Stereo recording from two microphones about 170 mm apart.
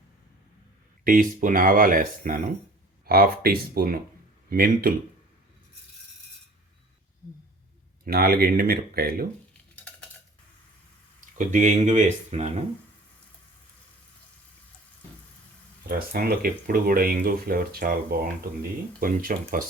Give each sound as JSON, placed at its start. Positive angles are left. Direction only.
{"t": 1.0, "sound": "speech", "side_deg": -55}
{"t": 8.0, "sound": "speech", "side_deg": -60}
{"t": 11.3, "sound": "speech", "side_deg": -45}
{"t": 15.9, "sound": "speech", "side_deg": -60}